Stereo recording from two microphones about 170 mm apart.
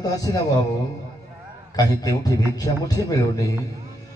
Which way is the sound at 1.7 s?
20° left (ahead or behind).